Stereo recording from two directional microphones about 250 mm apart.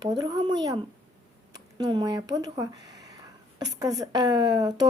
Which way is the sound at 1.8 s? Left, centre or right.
Centre.